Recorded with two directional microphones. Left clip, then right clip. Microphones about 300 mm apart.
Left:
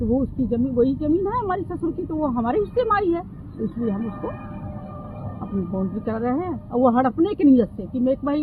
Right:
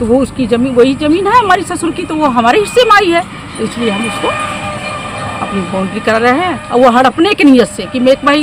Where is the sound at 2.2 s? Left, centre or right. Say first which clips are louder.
Right 16 dB; right.